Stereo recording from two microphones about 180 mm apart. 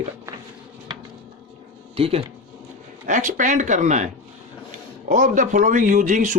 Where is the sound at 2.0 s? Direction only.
30° right (ahead or behind).